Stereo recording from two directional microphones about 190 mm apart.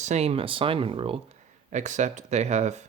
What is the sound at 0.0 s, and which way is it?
Speech, 35° right (ahead or behind).